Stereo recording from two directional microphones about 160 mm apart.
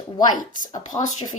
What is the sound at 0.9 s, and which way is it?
Speech, 45° left (ahead or behind).